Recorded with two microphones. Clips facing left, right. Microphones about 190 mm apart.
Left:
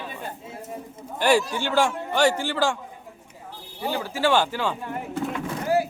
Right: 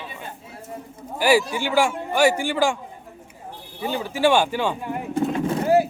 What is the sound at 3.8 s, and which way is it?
A man's voice, 20° right (ahead or behind).